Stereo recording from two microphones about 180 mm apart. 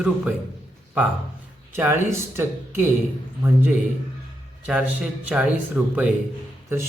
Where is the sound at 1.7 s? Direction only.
15° right (ahead or behind).